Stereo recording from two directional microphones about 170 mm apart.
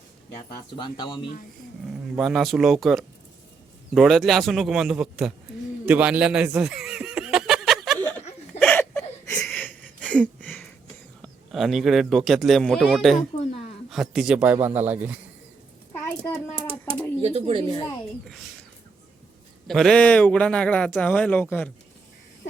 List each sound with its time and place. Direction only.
0.8 s speech: 25° left (ahead or behind)
2.1 s a man's voice: centre (ahead or behind)
5.8 s chuckle: 10° right (ahead or behind)
8.5 s a sound: 10° left (ahead or behind)
11.2 s a man's voice: centre (ahead or behind)
16.0 s a sound: 10° left (ahead or behind)
17.2 s speech: 35° right (ahead or behind)
19.6 s a man's voice: centre (ahead or behind)